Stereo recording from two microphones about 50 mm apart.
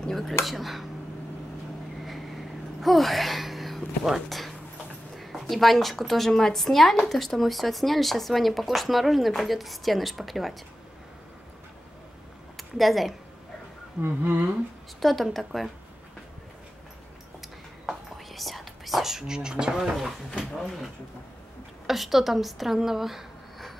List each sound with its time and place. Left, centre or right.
0.1 s a woman's voice: centre
2.8 s a woman's voice: centre
12.5 s speech: centre
14.0 s humming: right
15.0 s a woman's voice: centre
17.8 s whispering: centre
19.8 s a woman's voice: centre